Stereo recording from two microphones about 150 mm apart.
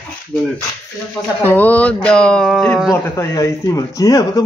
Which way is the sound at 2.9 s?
15° left (ahead or behind).